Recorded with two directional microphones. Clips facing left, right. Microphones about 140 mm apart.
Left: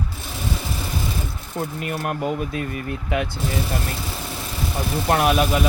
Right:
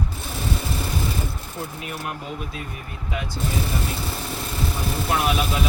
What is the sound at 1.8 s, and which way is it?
Speech, 55° left (ahead or behind).